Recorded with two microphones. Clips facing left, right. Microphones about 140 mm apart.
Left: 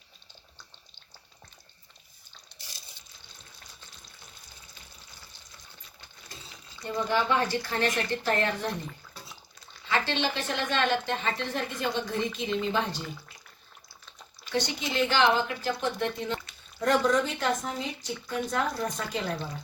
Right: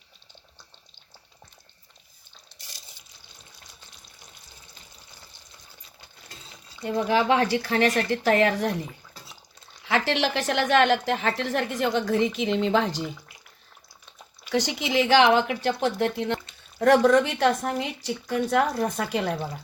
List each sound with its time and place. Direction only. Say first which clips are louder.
6.8 s speech: right 5 dB; 80° right
9.8 s a woman's voice: right 4 dB; 75° right (ahead or behind)
14.5 s a woman's voice: right 5 dB; 80° right